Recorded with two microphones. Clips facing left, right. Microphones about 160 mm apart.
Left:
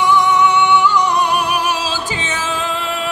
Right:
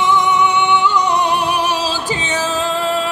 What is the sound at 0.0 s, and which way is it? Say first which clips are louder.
Music: left 1 dB; 20° right (ahead or behind).